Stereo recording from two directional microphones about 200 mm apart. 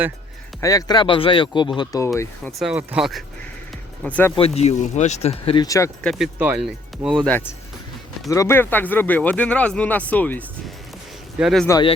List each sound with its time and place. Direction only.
0.6 s speech: 15° left (ahead or behind)
2.6 s speech: 5° right (ahead or behind)
4.4 s speech: 30° left (ahead or behind); by 6.1 s 15° left (ahead or behind)
6.1 s speech: centre (ahead or behind)
8.3 s speech: 15° left (ahead or behind); by 11.6 s centre (ahead or behind)